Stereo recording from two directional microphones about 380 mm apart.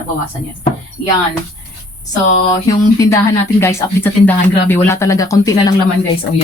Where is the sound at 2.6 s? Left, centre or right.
Centre.